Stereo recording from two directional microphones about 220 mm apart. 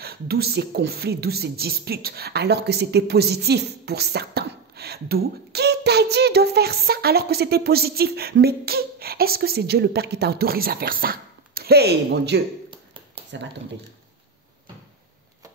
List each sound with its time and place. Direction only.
0.0 s speech: 45° right (ahead or behind)